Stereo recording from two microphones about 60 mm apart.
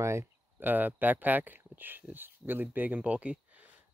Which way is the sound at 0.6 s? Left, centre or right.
Right.